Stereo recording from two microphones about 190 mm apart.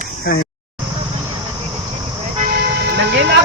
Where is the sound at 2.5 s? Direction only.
60° right (ahead or behind).